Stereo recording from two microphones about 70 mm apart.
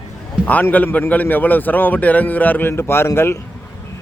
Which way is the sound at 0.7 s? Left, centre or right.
Left.